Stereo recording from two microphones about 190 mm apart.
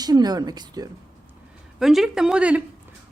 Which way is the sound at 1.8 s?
Centre (ahead or behind).